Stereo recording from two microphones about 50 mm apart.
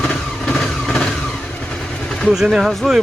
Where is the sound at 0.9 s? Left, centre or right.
Centre.